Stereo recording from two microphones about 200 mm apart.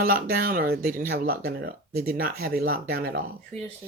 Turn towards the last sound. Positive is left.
turn(degrees=5)  # may be behind; listen again after turning